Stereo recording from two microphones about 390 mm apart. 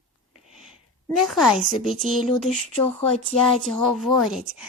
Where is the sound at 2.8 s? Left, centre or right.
Centre.